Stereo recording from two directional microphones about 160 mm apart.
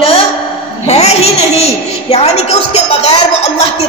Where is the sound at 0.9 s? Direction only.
40° left (ahead or behind).